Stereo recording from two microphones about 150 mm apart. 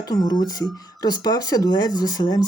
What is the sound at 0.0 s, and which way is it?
Speech, 25° left (ahead or behind).